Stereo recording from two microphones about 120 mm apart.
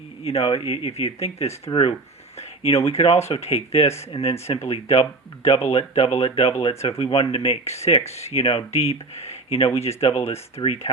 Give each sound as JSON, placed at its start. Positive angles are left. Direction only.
{"t": 0.3, "sound": "speech", "side_deg": 55}
{"t": 1.7, "sound": "speech", "side_deg": 45}
{"t": 2.6, "sound": "speech", "side_deg": 55}